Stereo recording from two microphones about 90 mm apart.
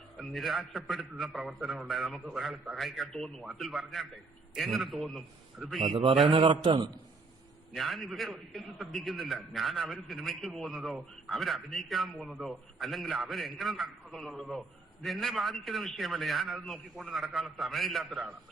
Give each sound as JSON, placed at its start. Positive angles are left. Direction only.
{"t": 0.2, "sound": "a man's voice", "side_deg": 0}
{"t": 6.2, "sound": "a man's voice", "side_deg": -70}
{"t": 7.8, "sound": "a man's voice", "side_deg": 0}